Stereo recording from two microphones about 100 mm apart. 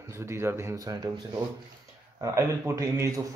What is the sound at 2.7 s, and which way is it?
Speech, 30° right (ahead or behind).